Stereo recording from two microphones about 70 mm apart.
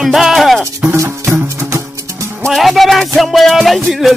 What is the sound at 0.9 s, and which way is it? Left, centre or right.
Music, right.